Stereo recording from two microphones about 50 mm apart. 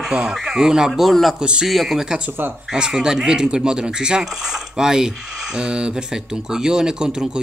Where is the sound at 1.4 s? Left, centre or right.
Centre.